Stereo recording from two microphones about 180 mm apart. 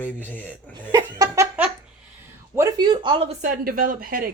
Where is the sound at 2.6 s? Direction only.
20° right (ahead or behind); by 4.3 s 50° right (ahead or behind).